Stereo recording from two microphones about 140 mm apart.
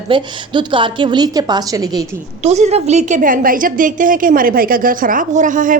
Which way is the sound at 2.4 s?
50° right (ahead or behind).